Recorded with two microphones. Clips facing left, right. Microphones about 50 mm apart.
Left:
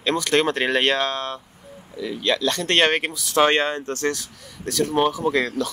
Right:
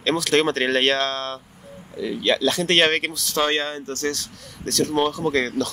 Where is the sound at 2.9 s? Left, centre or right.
Centre.